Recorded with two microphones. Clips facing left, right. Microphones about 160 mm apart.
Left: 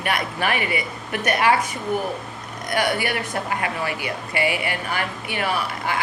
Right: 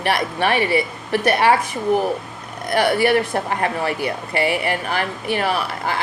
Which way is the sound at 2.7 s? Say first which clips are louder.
Right 7 dB; 35° right (ahead or behind).